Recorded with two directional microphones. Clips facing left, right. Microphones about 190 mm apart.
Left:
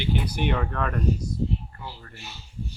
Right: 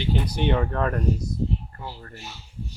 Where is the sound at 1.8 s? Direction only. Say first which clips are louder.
Right 3 dB; 40° right (ahead or behind).